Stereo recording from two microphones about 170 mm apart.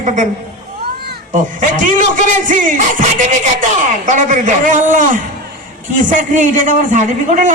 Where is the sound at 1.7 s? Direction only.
50° right (ahead or behind).